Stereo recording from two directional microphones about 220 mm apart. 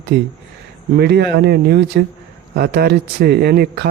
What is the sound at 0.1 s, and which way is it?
Speech, 50° right (ahead or behind).